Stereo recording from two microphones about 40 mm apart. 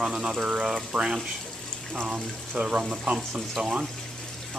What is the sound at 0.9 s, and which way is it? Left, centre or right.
Speech, centre.